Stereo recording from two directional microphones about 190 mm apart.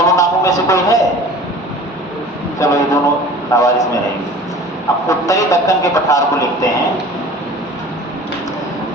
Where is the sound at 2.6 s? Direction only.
15° left (ahead or behind).